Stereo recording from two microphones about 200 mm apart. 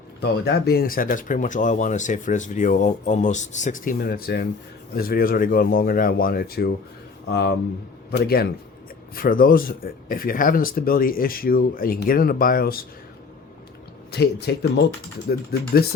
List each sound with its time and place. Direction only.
0.2 s speech: 55° left (ahead or behind)
14.1 s speech: 55° left (ahead or behind)